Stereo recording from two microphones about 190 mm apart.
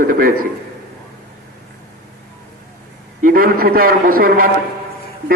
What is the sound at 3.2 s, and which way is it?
A man's voice, 50° right (ahead or behind).